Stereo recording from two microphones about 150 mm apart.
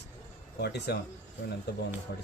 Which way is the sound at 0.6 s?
90° left.